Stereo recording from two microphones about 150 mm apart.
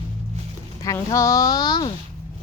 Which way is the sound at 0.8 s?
25° left (ahead or behind).